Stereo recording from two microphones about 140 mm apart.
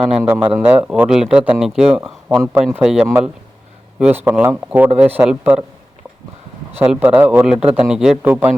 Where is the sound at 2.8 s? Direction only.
5° right (ahead or behind).